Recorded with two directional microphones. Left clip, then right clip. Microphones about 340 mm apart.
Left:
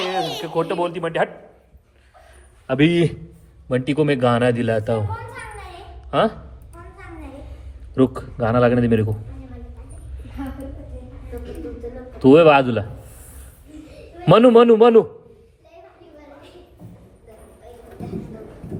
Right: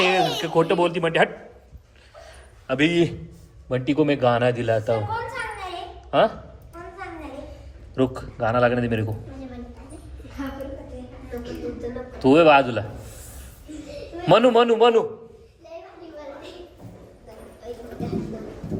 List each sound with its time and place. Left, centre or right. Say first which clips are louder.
0.0 s speech: right 4 dB; centre
2.6 s a man's voice: left 3 dB; centre
6.1 s speech: even; centre
7.9 s a man's voice: left 4 dB; centre
12.2 s a man's voice: left 3 dB; centre
14.3 s a man's voice: left 5 dB; centre